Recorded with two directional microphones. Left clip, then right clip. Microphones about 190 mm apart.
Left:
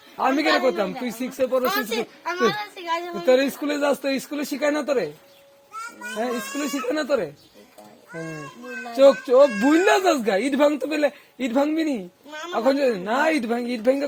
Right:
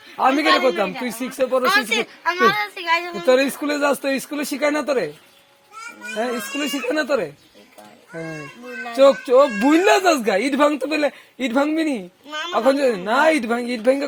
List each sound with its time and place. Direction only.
0.2 s speech: 35° right (ahead or behind)
1.6 s speech: centre (ahead or behind)
2.0 s a child's voice: 25° right (ahead or behind)
3.2 s speech: 40° right (ahead or behind)
6.1 s speech: 35° right (ahead or behind)
8.1 s a child's voice: 25° right (ahead or behind)
8.9 s speech: 35° right (ahead or behind)